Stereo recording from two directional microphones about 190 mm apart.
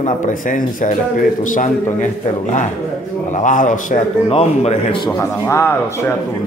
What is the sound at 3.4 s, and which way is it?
A man's voice, 40° left (ahead or behind).